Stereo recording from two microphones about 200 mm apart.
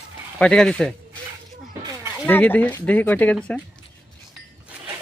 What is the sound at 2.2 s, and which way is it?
Speech, 10° left (ahead or behind).